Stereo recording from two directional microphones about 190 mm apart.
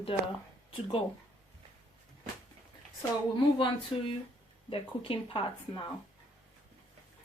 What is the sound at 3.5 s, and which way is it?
Speech, 25° left (ahead or behind).